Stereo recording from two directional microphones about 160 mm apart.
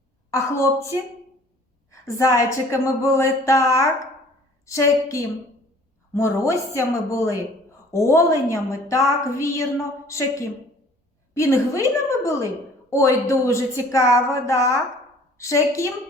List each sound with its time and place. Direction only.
0.3 s a woman's voice: 20° left (ahead or behind)